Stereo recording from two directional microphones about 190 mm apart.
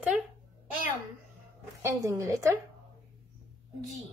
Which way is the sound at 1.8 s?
15° right (ahead or behind).